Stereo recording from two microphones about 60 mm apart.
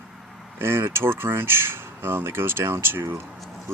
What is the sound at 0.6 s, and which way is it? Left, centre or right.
Speech, right.